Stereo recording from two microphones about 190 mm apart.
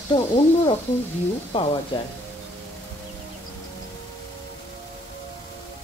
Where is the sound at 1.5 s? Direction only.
30° left (ahead or behind).